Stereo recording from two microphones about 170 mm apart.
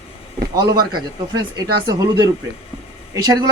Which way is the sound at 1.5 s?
25° right (ahead or behind).